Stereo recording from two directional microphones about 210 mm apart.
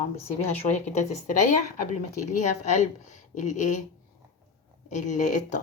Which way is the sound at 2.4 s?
35° left (ahead or behind).